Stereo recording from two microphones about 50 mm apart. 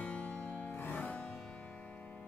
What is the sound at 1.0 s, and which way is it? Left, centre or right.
Music, left.